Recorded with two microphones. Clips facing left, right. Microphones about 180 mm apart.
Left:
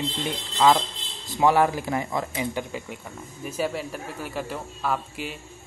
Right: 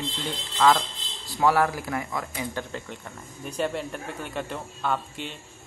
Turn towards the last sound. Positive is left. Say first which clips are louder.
# left 1 dB
turn(degrees=5)  # may be behind; listen again after turning